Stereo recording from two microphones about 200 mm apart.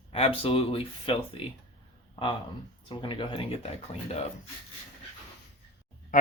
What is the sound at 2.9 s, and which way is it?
Speech, 25° left (ahead or behind).